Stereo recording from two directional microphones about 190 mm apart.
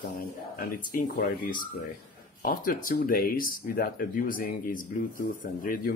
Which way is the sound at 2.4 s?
50° left (ahead or behind).